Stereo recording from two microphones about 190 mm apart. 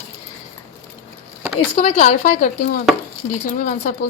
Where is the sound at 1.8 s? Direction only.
45° left (ahead or behind).